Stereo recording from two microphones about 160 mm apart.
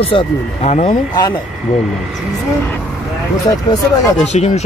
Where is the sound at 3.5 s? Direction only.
25° left (ahead or behind).